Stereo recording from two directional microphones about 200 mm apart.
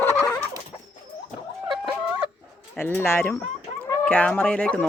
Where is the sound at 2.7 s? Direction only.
10° left (ahead or behind).